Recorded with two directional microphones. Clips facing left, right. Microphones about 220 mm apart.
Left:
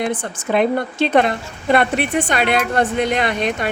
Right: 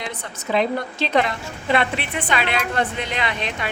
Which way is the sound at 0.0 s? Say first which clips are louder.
Left 9 dB; 50° left (ahead or behind).